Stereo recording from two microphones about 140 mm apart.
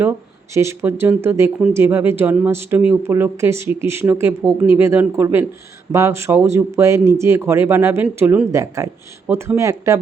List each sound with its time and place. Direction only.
0.5 s speech: 20° right (ahead or behind)
9.2 s speech: 10° right (ahead or behind)
9.6 s speech: 20° right (ahead or behind)